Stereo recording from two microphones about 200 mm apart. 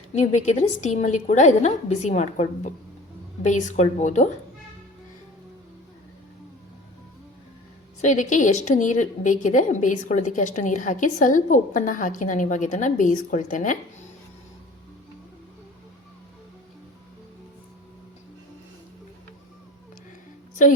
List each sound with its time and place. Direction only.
0.1 s a woman's voice: 35° left (ahead or behind)
8.0 s a woman's voice: 40° left (ahead or behind)